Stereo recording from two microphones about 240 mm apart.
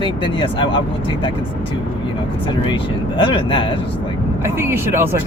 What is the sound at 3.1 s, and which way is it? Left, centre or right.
Speech, centre.